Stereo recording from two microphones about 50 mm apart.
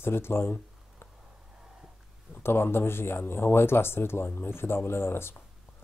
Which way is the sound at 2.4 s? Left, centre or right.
Left.